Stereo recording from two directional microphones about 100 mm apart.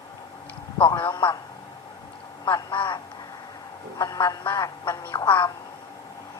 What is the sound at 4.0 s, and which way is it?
Speech, 35° left (ahead or behind).